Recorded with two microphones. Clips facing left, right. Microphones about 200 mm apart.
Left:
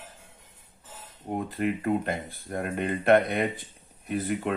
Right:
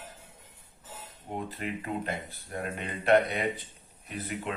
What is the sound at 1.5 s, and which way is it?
Speech, 50° left (ahead or behind).